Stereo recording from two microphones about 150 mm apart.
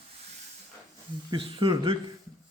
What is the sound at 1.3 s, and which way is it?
Speech, 35° right (ahead or behind).